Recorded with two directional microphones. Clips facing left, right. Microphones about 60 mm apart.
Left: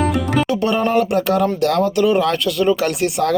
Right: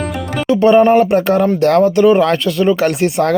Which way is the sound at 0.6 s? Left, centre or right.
Right.